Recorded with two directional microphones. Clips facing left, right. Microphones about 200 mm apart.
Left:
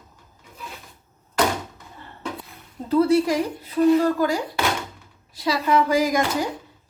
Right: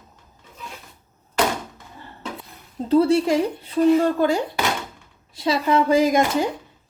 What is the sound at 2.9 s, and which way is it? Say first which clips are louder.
A woman's voice: right 1 dB; 30° right (ahead or behind).